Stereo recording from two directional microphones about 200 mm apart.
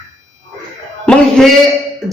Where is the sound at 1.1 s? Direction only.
5° left (ahead or behind).